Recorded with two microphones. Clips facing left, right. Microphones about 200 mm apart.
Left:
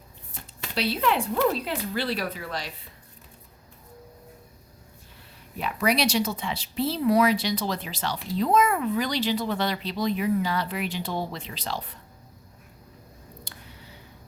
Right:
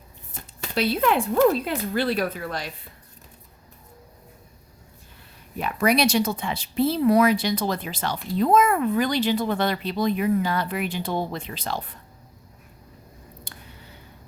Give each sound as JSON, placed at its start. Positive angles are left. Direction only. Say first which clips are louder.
{"t": 0.7, "sound": "speech", "louder": "right 3 dB", "side_deg": -50}
{"t": 5.5, "sound": "speech", "louder": "right 4 dB", "side_deg": -50}
{"t": 13.5, "sound": "a sound", "louder": "right 1 dB", "side_deg": -50}